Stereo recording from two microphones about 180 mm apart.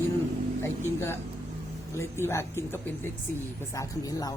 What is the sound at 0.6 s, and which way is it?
Speech, 15° left (ahead or behind).